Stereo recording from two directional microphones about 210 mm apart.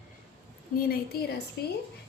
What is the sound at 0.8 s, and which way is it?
Speech, 45° left (ahead or behind).